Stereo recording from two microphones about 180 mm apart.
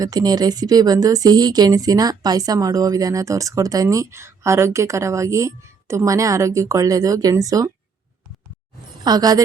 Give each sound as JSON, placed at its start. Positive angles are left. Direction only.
{"t": 0.0, "sound": "speech", "side_deg": -20}
{"t": 9.0, "sound": "a woman's voice", "side_deg": -20}